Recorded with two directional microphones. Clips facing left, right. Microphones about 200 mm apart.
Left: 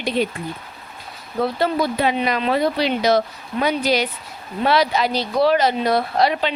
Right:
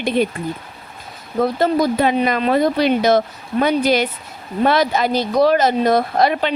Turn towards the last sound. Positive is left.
turn(degrees=-50)  # may be behind; listen again after turning